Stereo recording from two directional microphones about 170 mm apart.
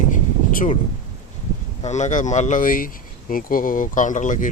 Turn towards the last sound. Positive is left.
turn(degrees=50)  # may be behind; listen again after turning